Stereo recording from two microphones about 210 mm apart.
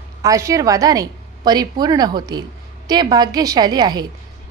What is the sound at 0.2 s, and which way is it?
A woman's voice, 15° right (ahead or behind).